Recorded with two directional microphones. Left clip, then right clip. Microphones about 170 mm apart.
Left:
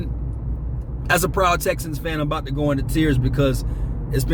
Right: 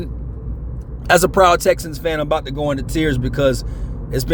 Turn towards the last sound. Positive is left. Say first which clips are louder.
# right 3 dB
turn(degrees=-45)  # may be behind; listen again after turning